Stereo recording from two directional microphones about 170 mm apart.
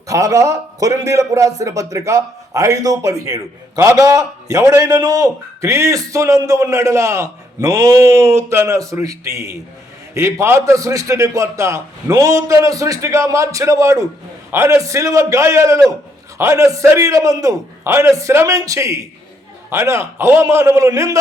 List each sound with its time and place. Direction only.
0.1 s a man's voice: 20° right (ahead or behind)